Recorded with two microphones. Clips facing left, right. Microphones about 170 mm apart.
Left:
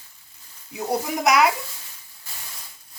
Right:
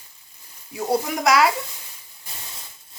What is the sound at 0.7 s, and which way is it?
Speech, 20° left (ahead or behind).